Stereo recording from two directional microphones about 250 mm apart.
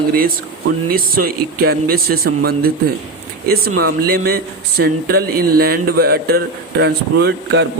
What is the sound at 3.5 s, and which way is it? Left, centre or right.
A man's voice, right.